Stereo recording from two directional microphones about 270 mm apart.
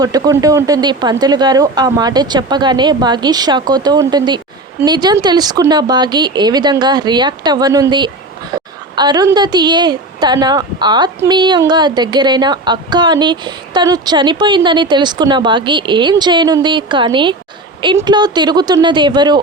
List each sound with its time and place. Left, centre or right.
0.0 s a woman's voice: centre